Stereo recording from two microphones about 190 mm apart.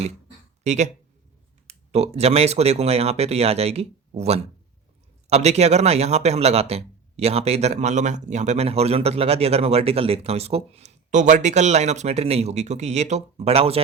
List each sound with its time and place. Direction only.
0.6 s speech: 35° right (ahead or behind)